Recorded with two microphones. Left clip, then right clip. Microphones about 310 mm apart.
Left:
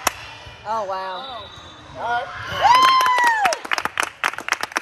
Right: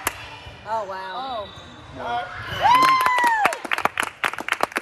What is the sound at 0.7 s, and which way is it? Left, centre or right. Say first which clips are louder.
Speech: left 3 dB; left.